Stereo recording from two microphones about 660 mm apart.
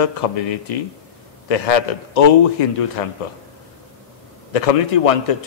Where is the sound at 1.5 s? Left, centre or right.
Left.